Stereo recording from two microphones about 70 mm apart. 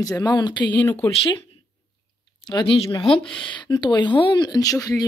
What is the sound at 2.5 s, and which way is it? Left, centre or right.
Speech, left.